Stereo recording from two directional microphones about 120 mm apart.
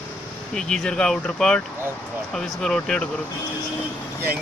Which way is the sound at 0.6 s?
5° left (ahead or behind).